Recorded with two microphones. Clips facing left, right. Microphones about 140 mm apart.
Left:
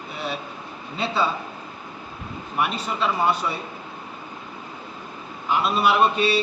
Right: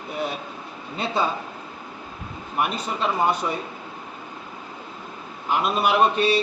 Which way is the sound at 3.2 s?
45° right (ahead or behind).